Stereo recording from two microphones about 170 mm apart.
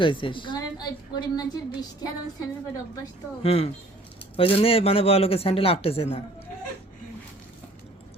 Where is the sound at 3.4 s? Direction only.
35° left (ahead or behind).